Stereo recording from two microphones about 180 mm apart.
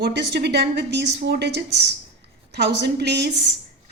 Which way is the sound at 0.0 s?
65° right (ahead or behind).